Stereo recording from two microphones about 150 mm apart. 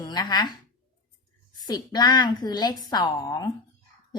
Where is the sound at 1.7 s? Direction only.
30° left (ahead or behind).